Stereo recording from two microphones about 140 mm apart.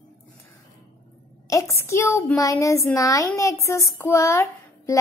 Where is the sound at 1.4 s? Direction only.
20° left (ahead or behind).